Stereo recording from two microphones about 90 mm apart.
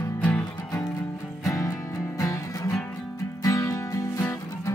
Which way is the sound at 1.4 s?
40° left (ahead or behind).